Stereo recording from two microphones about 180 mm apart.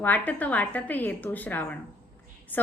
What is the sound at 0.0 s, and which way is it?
A woman's voice, 10° left (ahead or behind).